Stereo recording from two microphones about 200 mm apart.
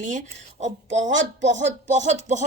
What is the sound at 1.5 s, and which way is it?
Speech, 35° right (ahead or behind).